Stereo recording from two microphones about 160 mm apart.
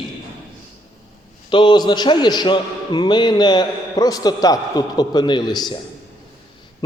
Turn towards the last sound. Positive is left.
turn(degrees=25)  # may be behind; listen again after turning